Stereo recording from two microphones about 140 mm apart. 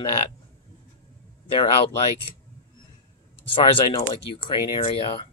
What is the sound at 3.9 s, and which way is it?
Speech, 35° left (ahead or behind).